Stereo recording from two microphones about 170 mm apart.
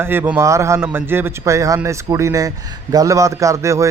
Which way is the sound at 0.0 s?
10° right (ahead or behind).